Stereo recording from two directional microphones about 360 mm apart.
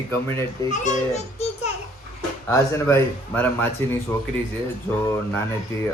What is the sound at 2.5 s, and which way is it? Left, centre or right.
Speech, centre.